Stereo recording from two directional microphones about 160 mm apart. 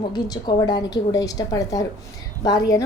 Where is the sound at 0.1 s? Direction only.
25° left (ahead or behind).